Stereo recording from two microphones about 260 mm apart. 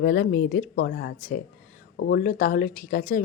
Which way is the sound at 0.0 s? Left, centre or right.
Left.